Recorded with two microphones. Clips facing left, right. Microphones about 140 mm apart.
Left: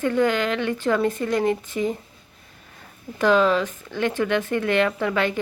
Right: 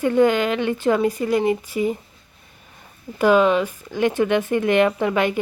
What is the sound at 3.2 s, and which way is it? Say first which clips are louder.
Speech: right 3 dB; 10° right (ahead or behind).